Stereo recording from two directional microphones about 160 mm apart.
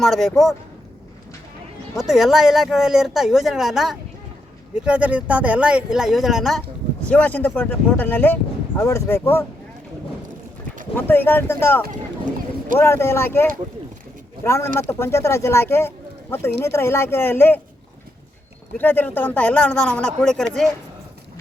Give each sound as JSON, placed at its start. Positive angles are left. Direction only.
{"t": 0.0, "sound": "speech", "side_deg": 0}
{"t": 2.0, "sound": "speech", "side_deg": -5}
{"t": 10.9, "sound": "speech", "side_deg": 15}
{"t": 11.9, "sound": "speech", "side_deg": -55}
{"t": 12.8, "sound": "speech", "side_deg": 15}
{"t": 18.8, "sound": "speech", "side_deg": 10}